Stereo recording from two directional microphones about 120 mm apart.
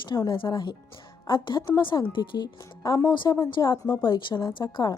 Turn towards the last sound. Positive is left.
turn(degrees=35)  # may be behind; listen again after turning